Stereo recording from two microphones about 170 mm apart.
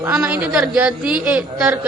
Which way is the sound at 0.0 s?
5° right (ahead or behind).